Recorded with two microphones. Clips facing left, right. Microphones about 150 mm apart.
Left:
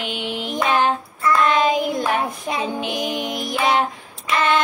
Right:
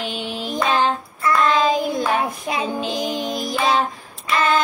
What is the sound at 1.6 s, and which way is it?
Music, 15° left (ahead or behind).